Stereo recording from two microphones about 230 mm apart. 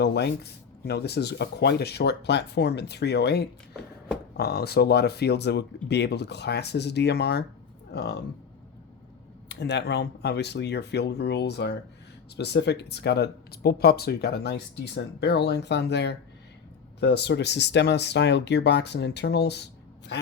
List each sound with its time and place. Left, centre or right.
0.0 s speech: left
9.5 s speech: left